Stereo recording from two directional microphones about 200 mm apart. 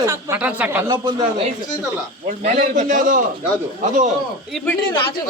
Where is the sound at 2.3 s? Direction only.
40° right (ahead or behind).